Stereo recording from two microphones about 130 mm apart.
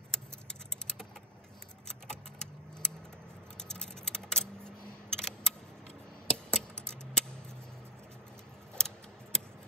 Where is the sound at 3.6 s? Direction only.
5° left (ahead or behind).